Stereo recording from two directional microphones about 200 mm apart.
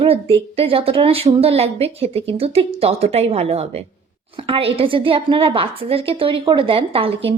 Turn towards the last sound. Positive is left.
turn(degrees=-25)  # may be behind; listen again after turning